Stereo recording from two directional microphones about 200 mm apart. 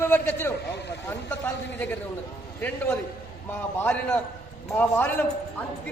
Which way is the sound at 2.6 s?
10° left (ahead or behind).